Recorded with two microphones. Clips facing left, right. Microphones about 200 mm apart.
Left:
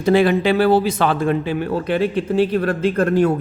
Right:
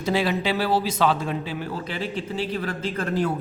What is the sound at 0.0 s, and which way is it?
Speech, 55° left (ahead or behind).